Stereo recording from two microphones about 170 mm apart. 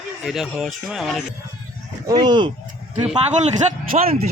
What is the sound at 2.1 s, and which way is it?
Speech, 25° right (ahead or behind).